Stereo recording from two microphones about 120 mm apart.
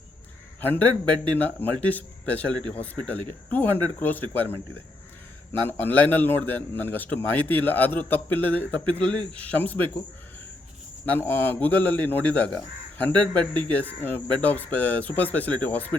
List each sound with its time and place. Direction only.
0.6 s a man's voice: 15° left (ahead or behind)
11.0 s a man's voice: 15° left (ahead or behind)